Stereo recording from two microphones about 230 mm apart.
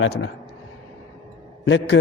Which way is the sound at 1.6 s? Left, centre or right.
Left.